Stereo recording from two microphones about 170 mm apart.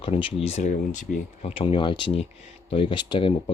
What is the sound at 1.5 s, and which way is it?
Speech, 30° left (ahead or behind).